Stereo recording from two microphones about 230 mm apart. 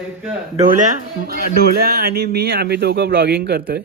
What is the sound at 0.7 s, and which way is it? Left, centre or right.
A man's voice, right.